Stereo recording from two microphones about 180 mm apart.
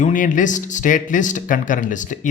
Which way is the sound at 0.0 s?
45° left (ahead or behind).